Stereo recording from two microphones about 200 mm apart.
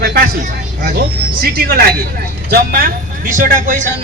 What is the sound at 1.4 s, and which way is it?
A man's voice, 50° right (ahead or behind).